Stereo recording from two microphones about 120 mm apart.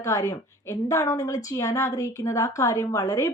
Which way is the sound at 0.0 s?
25° left (ahead or behind).